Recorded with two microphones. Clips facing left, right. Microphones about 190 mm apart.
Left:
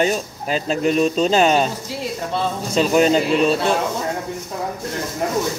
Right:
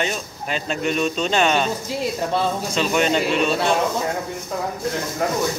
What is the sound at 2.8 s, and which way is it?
Speech, 35° left (ahead or behind).